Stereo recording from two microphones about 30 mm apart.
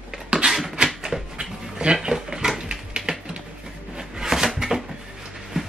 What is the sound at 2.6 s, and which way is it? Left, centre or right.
Typewriter, right.